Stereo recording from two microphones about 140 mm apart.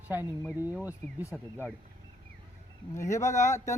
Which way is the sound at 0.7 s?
10° right (ahead or behind).